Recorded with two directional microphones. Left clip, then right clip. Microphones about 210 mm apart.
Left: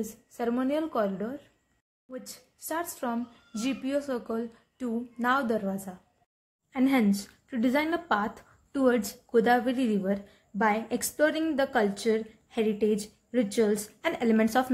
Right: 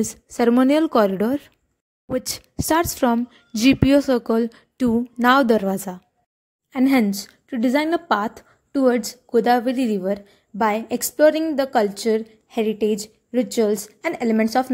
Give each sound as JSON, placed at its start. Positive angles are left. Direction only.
{"t": 0.4, "sound": "a woman's voice", "side_deg": -50}